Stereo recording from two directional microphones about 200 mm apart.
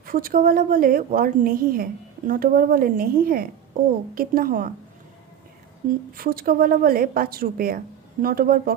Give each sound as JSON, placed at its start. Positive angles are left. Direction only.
{"t": 0.0, "sound": "a woman's voice", "side_deg": -45}
{"t": 5.9, "sound": "a woman's voice", "side_deg": -45}